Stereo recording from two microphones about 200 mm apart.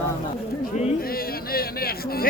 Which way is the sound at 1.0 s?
50° left (ahead or behind).